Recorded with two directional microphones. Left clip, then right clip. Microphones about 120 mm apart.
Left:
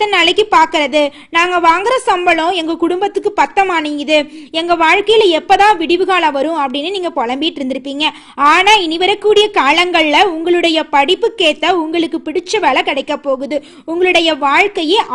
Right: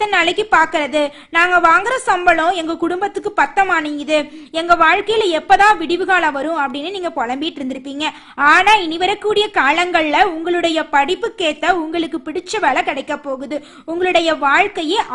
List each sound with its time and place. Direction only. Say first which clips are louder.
0.0 s a woman's voice: left 4 dB; 25° left (ahead or behind)